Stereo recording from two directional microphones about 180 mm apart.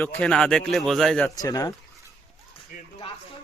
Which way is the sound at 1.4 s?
20° left (ahead or behind).